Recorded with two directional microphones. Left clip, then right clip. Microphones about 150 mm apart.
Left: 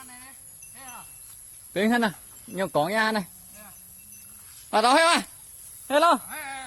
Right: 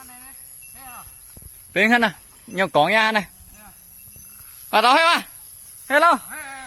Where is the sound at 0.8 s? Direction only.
40° left (ahead or behind).